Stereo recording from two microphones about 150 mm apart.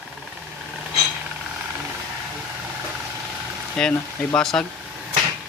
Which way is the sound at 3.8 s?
5° left (ahead or behind).